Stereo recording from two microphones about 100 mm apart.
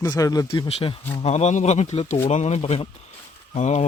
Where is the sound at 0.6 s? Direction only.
85° left.